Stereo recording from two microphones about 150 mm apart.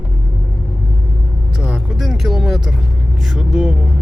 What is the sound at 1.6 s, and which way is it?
Speech, 5° right (ahead or behind).